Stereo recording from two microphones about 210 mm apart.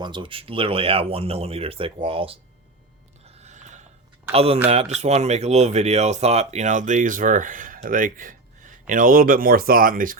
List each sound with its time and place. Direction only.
0.0 s speech: 25° right (ahead or behind)
3.2 s a sound: 30° right (ahead or behind)
4.3 s speech: 30° right (ahead or behind)